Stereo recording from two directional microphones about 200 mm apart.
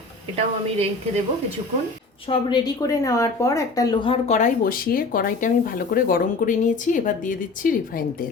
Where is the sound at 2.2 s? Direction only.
25° left (ahead or behind); by 8.2 s 45° left (ahead or behind).